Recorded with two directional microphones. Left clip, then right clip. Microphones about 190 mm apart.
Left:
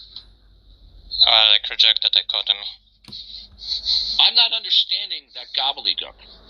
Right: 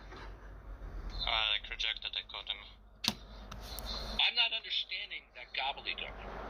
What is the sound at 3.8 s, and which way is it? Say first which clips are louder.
A man's voice: left 15 dB; 50° left (ahead or behind).